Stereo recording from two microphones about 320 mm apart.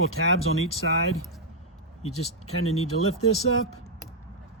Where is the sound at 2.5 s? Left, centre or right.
Left.